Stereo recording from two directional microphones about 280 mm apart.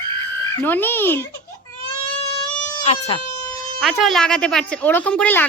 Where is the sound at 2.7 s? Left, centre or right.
Left.